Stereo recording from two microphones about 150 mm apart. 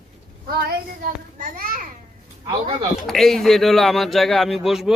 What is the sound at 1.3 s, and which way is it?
Speech, 60° right (ahead or behind).